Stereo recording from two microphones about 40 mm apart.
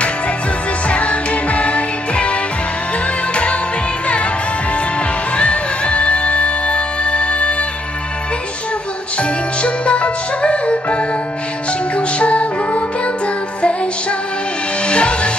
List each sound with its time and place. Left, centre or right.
0.8 s music: left
5.3 s music: left
9.2 s music: left
14.8 s music: left